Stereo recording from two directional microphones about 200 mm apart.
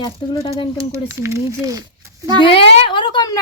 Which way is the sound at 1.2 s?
15° right (ahead or behind).